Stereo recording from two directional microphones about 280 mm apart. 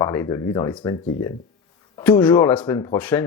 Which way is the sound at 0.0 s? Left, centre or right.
Centre.